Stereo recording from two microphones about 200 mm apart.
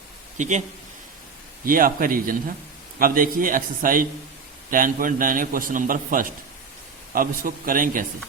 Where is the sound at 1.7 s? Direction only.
45° right (ahead or behind).